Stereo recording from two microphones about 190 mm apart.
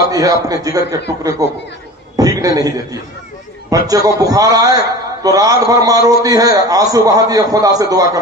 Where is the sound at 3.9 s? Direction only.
20° right (ahead or behind).